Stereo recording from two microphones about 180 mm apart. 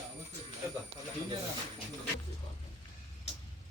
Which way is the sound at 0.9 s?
90° right.